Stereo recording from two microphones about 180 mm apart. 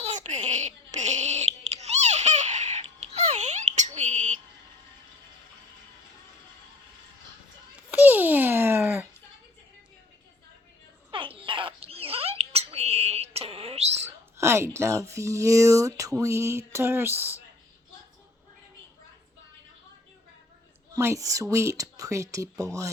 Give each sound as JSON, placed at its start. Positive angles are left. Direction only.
{"t": 0.0, "sound": "a sound", "side_deg": -40}
{"t": 7.9, "sound": "babbling", "side_deg": -10}
{"t": 11.1, "sound": "rodents", "side_deg": -30}
{"t": 14.3, "sound": "speech", "side_deg": -15}
{"t": 20.9, "sound": "speech", "side_deg": -15}